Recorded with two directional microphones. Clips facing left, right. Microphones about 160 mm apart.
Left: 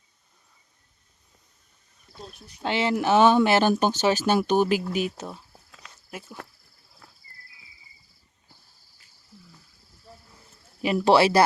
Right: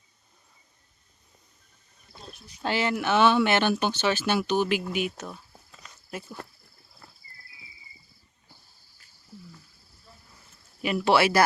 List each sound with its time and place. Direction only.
2.6 s speech: 25° left (ahead or behind)
5.5 s walk: 5° left (ahead or behind)
7.0 s a sound: 5° left (ahead or behind)
10.8 s speech: 35° left (ahead or behind)